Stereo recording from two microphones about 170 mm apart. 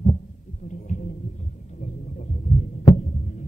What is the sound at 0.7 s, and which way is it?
Heart sounds, 45° left (ahead or behind).